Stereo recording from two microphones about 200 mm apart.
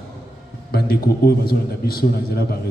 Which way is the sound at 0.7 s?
50° left (ahead or behind).